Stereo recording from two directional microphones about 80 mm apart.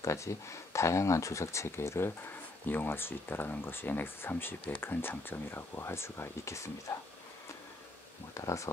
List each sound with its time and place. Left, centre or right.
0.0 s speech: left
8.4 s speech: left